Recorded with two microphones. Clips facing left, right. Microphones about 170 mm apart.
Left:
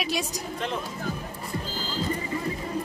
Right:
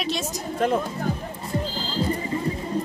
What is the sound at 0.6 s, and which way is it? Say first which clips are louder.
Music: right 10 dB; 45° right (ahead or behind).